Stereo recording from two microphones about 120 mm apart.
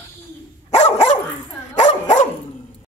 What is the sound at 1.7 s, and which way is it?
Dog, 85° left.